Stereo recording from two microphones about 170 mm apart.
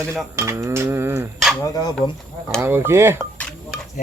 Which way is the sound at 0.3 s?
15° right (ahead or behind).